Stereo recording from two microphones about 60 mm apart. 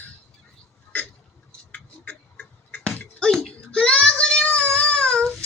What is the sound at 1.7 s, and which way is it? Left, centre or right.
Tick-tock, left.